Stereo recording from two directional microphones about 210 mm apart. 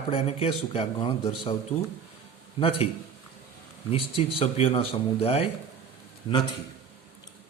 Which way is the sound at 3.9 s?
30° left (ahead or behind).